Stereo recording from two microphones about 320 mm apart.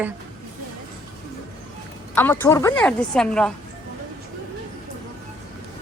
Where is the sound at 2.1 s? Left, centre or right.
Centre.